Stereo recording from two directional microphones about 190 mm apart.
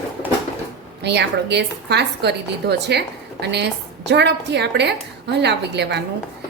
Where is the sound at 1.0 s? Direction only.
65° right (ahead or behind).